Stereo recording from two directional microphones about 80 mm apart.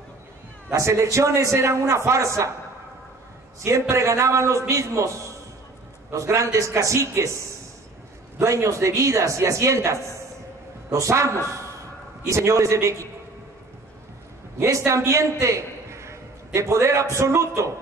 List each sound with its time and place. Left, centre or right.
0.7 s a man's voice: right
3.9 s a man's voice: right
8.4 s a man's voice: right
14.9 s a man's voice: right